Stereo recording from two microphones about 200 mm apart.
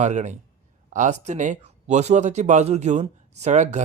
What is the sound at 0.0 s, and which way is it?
Speech, 35° right (ahead or behind).